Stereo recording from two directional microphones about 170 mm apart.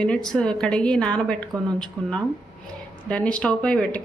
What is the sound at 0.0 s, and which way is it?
A woman's voice, 5° left (ahead or behind).